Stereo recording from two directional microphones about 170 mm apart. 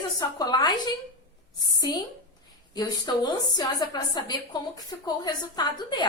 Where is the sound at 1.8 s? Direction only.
25° left (ahead or behind).